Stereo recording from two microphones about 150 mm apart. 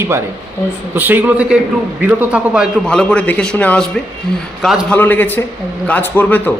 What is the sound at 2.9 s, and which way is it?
A man's voice, 5° left (ahead or behind).